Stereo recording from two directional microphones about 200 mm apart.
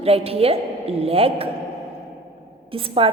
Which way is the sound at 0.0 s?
30° right (ahead or behind).